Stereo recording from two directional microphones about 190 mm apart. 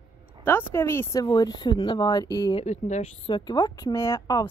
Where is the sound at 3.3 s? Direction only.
20° left (ahead or behind).